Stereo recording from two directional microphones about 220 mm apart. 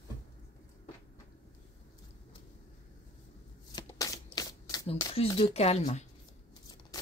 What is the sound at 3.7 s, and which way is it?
Shuffling cards, 15° left (ahead or behind).